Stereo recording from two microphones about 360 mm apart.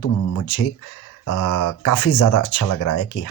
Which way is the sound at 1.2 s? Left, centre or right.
Left.